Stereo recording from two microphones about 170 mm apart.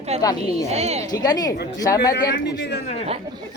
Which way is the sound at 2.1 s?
90° left.